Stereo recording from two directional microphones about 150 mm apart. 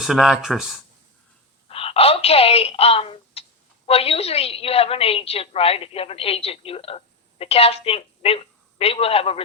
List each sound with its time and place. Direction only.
0.0 s speech: centre (ahead or behind)
1.6 s a woman's voice: 40° left (ahead or behind)